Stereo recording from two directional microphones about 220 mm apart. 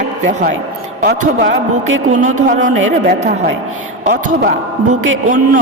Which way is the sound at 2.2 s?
35° right (ahead or behind).